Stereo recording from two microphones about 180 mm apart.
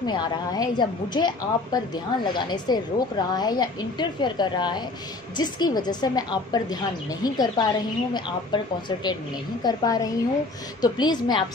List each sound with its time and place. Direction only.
0.0 s a woman's voice: 25° left (ahead or behind)
9.6 s a woman's voice: 20° left (ahead or behind)